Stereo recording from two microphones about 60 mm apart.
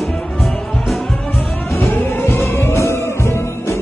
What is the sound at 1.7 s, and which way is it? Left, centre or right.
Music, left.